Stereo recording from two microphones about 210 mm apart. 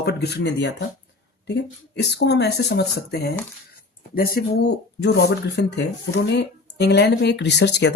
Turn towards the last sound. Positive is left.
turn(degrees=55)  # may be behind; listen again after turning